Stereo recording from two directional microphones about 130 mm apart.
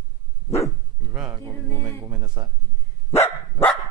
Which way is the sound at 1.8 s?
30° right (ahead or behind).